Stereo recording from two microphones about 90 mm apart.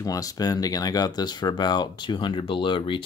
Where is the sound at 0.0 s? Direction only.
40° left (ahead or behind).